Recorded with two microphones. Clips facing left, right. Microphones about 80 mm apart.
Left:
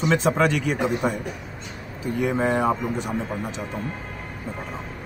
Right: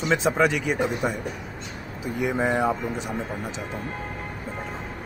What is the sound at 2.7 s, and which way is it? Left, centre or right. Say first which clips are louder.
Speech: left 2 dB; left.